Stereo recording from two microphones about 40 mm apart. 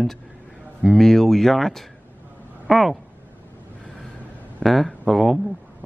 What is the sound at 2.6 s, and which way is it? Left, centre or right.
Speech, centre.